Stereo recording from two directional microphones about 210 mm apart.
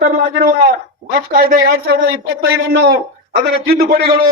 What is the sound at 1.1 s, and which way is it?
A man's voice, 45° right (ahead or behind).